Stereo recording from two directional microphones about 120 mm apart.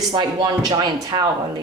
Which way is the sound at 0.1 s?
35° right (ahead or behind).